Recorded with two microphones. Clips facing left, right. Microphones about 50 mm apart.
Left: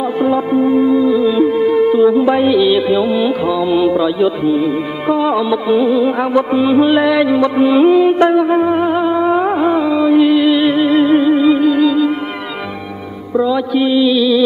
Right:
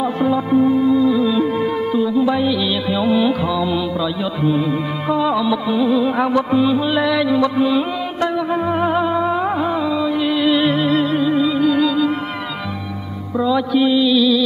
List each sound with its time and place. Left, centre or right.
0.0 s music: centre
2.0 s music: left
2.5 s music: centre
3.0 s mantra: centre
3.4 s music: centre
4.5 s music: centre
5.9 s mantra: centre
6.8 s music: left
8.7 s music: centre
10.2 s music: centre
13.4 s mantra: centre